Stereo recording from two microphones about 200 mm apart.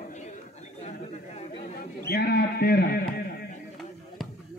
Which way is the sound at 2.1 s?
50° left (ahead or behind).